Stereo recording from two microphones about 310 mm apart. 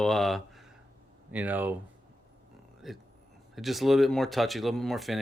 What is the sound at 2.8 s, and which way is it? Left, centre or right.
Speech, centre.